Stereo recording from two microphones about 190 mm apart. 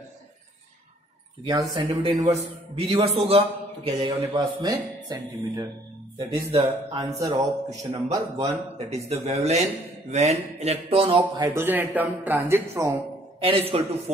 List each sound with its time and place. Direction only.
1.5 s a man's voice: 20° right (ahead or behind)
1.9 s a man's voice: 30° right (ahead or behind); by 12.9 s 15° right (ahead or behind)
13.4 s a man's voice: 30° right (ahead or behind)